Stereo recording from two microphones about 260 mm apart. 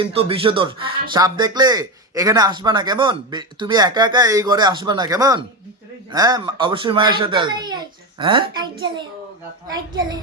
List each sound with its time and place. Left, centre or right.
0.0 s speech: right